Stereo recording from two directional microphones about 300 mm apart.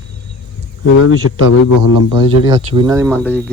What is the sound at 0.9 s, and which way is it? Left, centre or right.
Speech, left.